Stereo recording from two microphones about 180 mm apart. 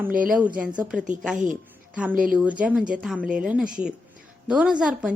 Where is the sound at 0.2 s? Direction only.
5° right (ahead or behind).